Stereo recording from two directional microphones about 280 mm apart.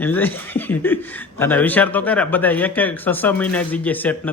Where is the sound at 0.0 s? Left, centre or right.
Centre.